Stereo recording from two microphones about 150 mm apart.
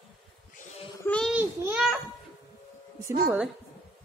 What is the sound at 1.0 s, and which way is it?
Speech, 5° left (ahead or behind).